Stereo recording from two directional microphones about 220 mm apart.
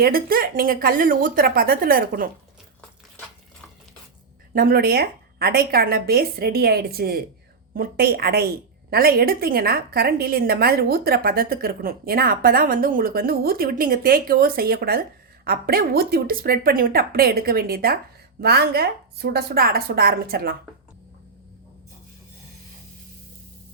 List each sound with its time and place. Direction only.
0.0 s speech: 40° right (ahead or behind)
4.5 s a woman's voice: 45° right (ahead or behind)